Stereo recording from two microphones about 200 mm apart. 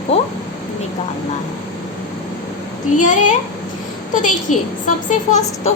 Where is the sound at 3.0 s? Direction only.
40° left (ahead or behind).